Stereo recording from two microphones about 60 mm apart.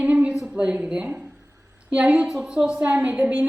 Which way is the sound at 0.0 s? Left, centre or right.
Right.